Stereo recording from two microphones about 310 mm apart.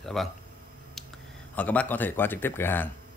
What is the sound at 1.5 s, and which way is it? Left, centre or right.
Speech, centre.